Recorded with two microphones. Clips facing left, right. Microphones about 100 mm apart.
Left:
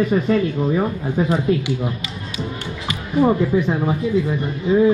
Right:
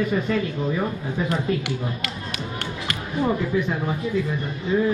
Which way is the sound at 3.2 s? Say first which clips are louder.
Left 6 dB; 30° left (ahead or behind).